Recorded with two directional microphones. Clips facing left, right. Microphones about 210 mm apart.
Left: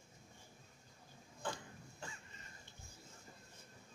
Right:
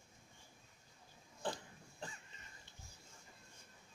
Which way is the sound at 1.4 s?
35° right (ahead or behind).